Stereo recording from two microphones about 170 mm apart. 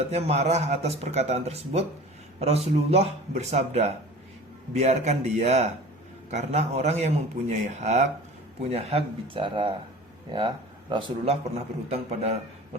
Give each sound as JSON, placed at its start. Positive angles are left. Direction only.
{"t": 0.1, "sound": "a man's voice", "side_deg": -40}